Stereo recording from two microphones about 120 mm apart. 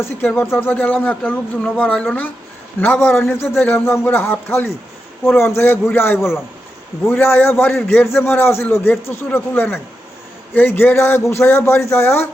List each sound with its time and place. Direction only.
0.0 s a man's voice: 15° left (ahead or behind)